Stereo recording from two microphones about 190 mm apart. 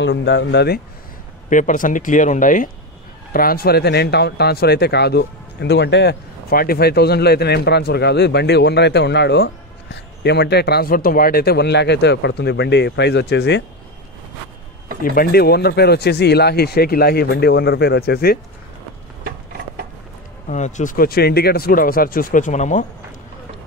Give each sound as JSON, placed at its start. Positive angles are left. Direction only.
{"t": 0.0, "sound": "speech", "side_deg": 70}
{"t": 1.5, "sound": "speech", "side_deg": 45}
{"t": 15.1, "sound": "speech", "side_deg": 55}
{"t": 20.4, "sound": "speech", "side_deg": 40}